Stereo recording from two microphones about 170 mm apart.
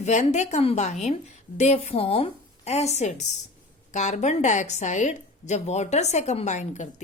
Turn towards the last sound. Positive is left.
turn(degrees=45)  # may be behind; listen again after turning